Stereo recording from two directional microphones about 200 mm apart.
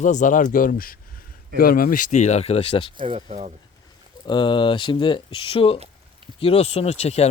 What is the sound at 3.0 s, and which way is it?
Speech, 30° right (ahead or behind).